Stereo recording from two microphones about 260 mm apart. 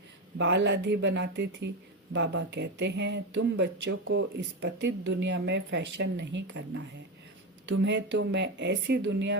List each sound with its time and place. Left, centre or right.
0.3 s speech: right